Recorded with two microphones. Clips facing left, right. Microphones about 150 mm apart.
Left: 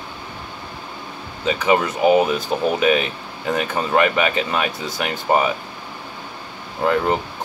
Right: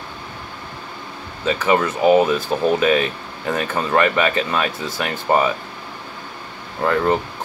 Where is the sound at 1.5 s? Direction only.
15° left (ahead or behind).